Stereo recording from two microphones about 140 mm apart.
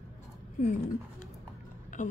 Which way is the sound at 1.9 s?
60° left (ahead or behind).